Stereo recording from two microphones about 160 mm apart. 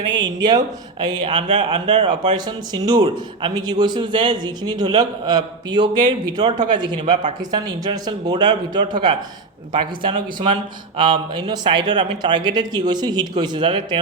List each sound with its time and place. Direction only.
0.0 s a man's voice: 25° right (ahead or behind)